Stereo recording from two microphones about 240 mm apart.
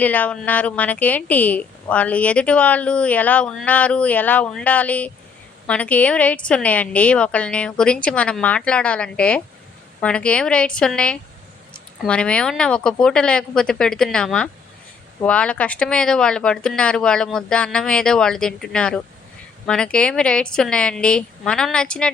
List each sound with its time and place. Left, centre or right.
0.0 s a woman's voice: centre